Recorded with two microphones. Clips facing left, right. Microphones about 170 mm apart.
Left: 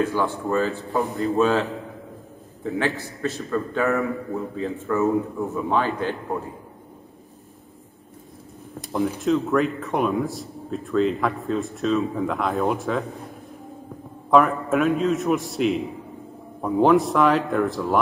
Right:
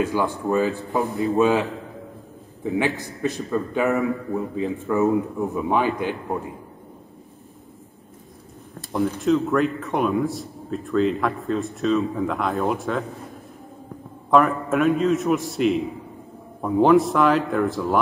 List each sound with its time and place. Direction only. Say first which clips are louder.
0.0 s a man's voice: right 1 dB; 15° right (ahead or behind)
3.0 s a man's voice: right 2 dB; 15° right (ahead or behind)
9.2 s a man's voice: right 1 dB; centre (ahead or behind)
14.3 s a man's voice: even; centre (ahead or behind)